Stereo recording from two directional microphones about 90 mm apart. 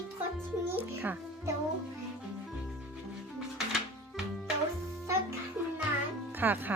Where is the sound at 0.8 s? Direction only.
20° right (ahead or behind).